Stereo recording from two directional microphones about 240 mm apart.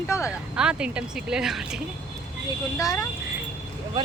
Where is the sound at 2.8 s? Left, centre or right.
Centre.